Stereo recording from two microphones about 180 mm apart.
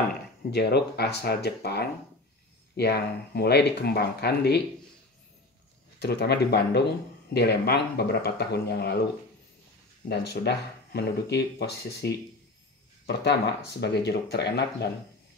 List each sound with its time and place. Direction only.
0.5 s speech: 65° left (ahead or behind)
5.9 s speech: 65° left (ahead or behind)
10.0 s speech: 65° left (ahead or behind)